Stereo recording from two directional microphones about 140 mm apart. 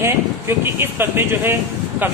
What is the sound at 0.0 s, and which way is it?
Speech, 20° right (ahead or behind).